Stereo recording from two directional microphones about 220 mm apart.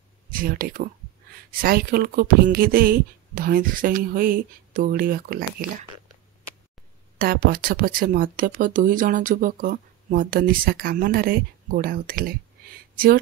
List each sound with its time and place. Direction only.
0.3 s speech: 40° right (ahead or behind)
7.2 s speech: 40° right (ahead or behind)